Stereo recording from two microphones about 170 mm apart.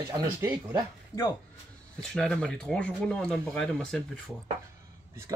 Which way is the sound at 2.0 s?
5° left (ahead or behind).